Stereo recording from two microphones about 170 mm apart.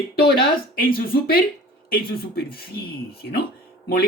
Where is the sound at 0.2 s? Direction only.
65° left (ahead or behind).